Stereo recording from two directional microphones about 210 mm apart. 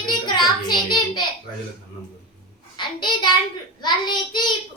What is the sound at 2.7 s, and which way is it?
Child singing, 20° left (ahead or behind).